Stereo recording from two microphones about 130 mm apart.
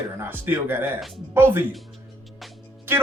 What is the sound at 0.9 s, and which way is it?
Speech, centre (ahead or behind).